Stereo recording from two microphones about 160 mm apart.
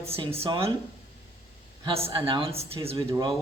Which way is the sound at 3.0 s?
20° right (ahead or behind).